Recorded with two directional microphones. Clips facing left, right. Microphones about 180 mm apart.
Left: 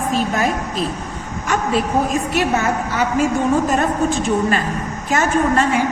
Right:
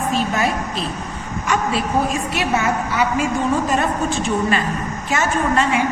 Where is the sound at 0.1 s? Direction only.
40° left (ahead or behind).